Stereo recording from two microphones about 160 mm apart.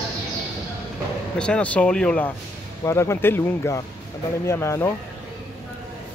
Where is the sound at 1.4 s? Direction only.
5° left (ahead or behind).